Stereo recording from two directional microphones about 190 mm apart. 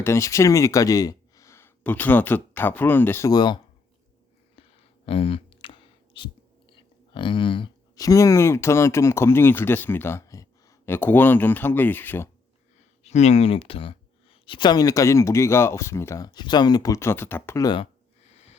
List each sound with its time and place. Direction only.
0.0 s speech: 15° left (ahead or behind)
5.0 s speech: 30° left (ahead or behind); by 12.3 s 10° left (ahead or behind)
13.0 s speech: 35° left (ahead or behind)
18.3 s wheeze: 35° left (ahead or behind)